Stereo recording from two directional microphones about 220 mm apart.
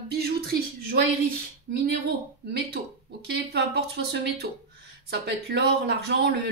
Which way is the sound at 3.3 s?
45° right (ahead or behind).